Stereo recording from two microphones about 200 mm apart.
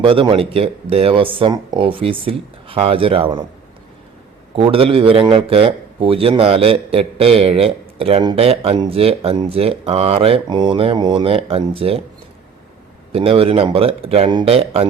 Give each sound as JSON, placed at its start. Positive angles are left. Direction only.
{"t": 0.0, "sound": "a man's voice", "side_deg": -25}
{"t": 4.5, "sound": "a man's voice", "side_deg": -25}
{"t": 13.1, "sound": "a man's voice", "side_deg": -25}